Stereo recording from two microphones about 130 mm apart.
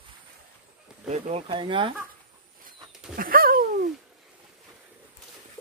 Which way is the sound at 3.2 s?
90° right.